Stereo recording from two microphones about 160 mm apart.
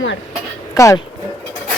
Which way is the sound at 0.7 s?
20° left (ahead or behind).